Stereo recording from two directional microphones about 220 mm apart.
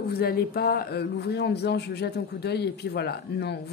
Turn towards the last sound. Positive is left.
turn(degrees=50)  # may be behind; listen again after turning